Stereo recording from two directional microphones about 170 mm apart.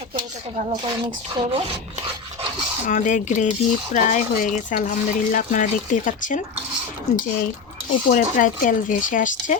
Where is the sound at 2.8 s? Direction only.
50° left (ahead or behind).